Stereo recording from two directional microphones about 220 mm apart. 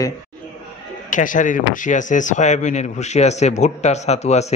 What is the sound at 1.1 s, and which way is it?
Speech, 35° left (ahead or behind).